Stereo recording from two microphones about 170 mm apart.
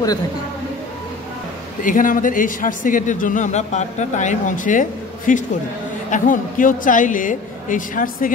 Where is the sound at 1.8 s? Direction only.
50° left (ahead or behind).